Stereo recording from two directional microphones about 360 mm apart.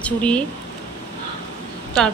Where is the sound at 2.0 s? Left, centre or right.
Centre.